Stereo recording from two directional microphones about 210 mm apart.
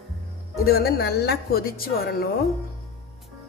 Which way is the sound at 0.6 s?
45° left (ahead or behind).